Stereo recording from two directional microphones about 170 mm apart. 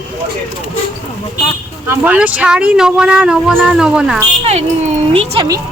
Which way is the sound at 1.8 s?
10° right (ahead or behind).